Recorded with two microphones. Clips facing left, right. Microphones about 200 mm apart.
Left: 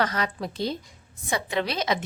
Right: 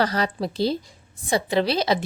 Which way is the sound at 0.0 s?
35° right (ahead or behind).